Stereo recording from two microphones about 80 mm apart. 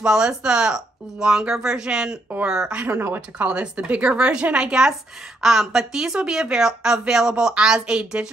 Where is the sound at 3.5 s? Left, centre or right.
Centre.